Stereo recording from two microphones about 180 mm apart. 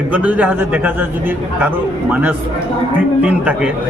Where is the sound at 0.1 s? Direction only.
5° right (ahead or behind).